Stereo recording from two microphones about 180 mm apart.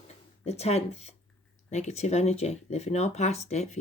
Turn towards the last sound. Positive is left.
turn(degrees=40)  # may be behind; listen again after turning